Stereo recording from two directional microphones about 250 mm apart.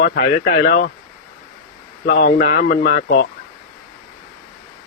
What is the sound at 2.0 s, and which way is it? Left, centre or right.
Speech, left.